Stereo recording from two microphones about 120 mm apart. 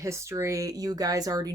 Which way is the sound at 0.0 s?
25° right (ahead or behind).